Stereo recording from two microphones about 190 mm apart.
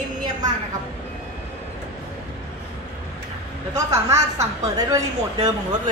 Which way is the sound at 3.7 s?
15° right (ahead or behind).